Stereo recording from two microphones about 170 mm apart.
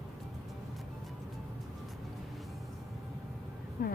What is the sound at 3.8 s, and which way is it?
Vehicle, 55° left (ahead or behind).